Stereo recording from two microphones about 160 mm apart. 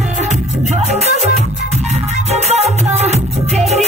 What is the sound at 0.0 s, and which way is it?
Music, 45° right (ahead or behind).